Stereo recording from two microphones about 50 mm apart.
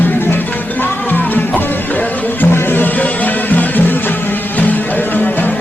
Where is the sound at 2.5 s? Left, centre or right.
Left.